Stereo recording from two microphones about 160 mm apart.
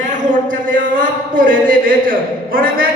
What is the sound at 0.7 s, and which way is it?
A man's voice, 55° right (ahead or behind).